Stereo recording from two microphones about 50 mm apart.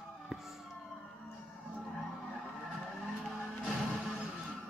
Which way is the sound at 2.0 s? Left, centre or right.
Centre.